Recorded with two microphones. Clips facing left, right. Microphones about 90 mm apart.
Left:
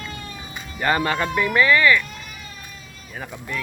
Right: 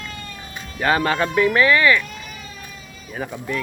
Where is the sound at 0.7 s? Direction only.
5° left (ahead or behind).